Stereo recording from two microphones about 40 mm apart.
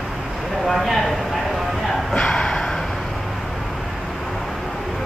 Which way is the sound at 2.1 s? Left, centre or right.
Left.